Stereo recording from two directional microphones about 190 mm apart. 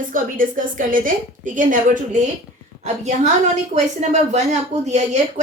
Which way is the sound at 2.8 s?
35° right (ahead or behind).